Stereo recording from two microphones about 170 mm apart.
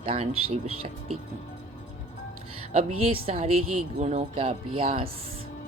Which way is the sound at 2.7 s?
35° right (ahead or behind).